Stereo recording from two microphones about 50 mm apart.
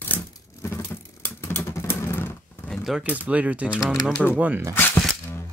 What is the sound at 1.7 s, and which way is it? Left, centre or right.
Vehicle, left.